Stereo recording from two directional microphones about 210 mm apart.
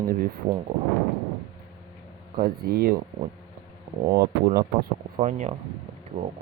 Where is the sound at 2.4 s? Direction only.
45° right (ahead or behind).